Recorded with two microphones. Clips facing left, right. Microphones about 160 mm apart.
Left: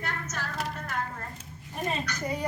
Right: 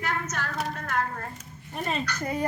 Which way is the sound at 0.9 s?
70° right (ahead or behind).